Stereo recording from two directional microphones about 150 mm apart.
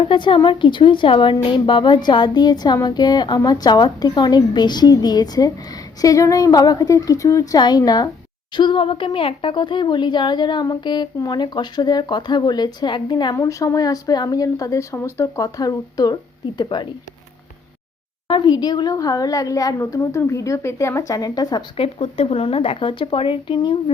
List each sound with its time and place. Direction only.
0.0 s a woman's voice: 35° left (ahead or behind)
18.3 s a woman's voice: 30° left (ahead or behind)
21.8 s speech: 40° left (ahead or behind)